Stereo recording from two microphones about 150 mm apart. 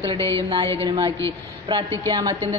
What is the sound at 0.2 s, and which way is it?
Speech, 20° left (ahead or behind).